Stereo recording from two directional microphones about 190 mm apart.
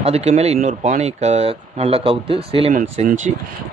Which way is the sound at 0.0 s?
35° right (ahead or behind).